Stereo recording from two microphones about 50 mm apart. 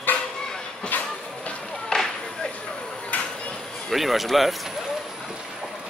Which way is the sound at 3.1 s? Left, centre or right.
Left.